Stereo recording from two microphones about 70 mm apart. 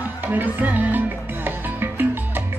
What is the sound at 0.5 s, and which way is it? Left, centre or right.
Music, right.